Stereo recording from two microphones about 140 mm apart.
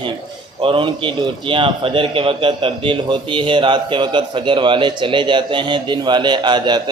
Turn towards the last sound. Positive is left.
turn(degrees=-30)  # may be behind; listen again after turning